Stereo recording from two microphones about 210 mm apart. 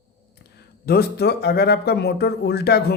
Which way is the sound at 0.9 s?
50° left (ahead or behind).